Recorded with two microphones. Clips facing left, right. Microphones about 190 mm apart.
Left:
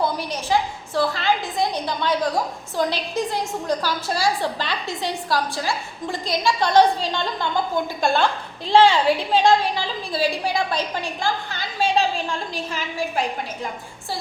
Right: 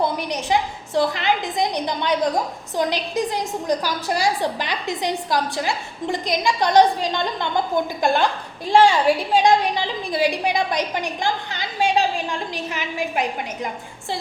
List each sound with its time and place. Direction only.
0.0 s a woman's voice: 20° right (ahead or behind)